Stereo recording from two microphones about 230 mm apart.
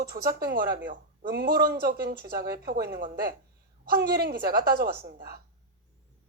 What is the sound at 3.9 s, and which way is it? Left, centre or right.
A woman's voice, right.